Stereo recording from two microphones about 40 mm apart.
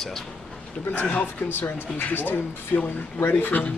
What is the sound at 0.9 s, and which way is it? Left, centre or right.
Speech, left.